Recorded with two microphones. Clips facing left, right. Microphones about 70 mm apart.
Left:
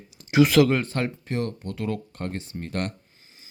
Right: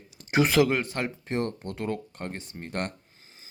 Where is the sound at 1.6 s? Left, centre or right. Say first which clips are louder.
Left 2 dB; right.